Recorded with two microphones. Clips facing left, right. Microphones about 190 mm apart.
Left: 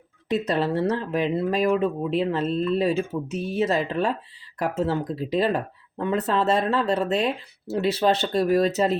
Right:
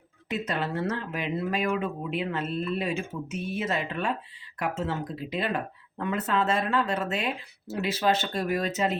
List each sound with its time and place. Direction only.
0.3 s speech: 35° left (ahead or behind)